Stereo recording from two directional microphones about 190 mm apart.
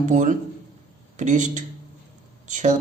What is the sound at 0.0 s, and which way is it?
A man's voice, 40° right (ahead or behind).